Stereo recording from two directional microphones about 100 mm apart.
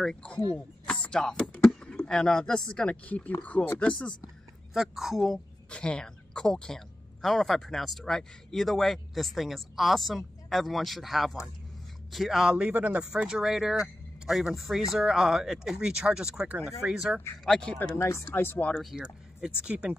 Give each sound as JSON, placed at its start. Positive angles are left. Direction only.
{"t": 0.0, "sound": "speech", "side_deg": 10}
{"t": 4.7, "sound": "speech", "side_deg": -5}
{"t": 17.5, "sound": "speech", "side_deg": 10}
{"t": 17.7, "sound": "speech", "side_deg": 30}
{"t": 18.8, "sound": "speech", "side_deg": 0}